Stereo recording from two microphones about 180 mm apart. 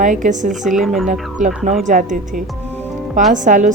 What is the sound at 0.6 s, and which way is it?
Speech, centre (ahead or behind).